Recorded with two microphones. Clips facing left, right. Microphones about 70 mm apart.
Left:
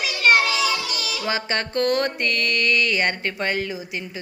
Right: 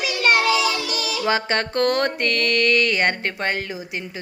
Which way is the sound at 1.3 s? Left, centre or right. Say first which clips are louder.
Right 3 dB; right.